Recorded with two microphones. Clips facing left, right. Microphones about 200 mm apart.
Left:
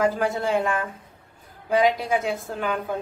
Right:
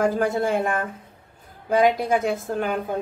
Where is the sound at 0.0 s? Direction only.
50° right (ahead or behind).